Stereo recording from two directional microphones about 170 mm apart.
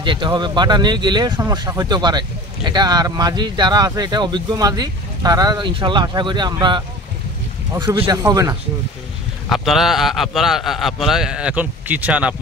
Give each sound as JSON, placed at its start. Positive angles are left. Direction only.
{"t": 0.0, "sound": "speech", "side_deg": -30}
{"t": 9.5, "sound": "a man's voice", "side_deg": 0}